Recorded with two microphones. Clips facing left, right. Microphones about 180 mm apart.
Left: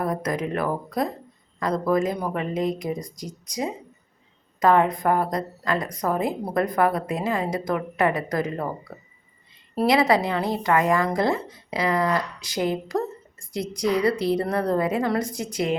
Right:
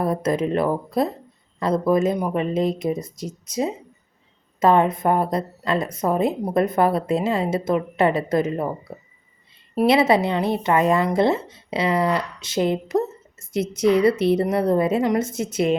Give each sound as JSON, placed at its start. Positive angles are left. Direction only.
{"t": 0.0, "sound": "speech", "side_deg": -25}